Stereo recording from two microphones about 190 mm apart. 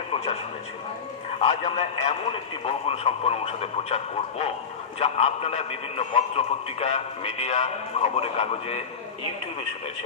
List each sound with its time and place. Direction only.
1.4 s a man's voice: 30° left (ahead or behind)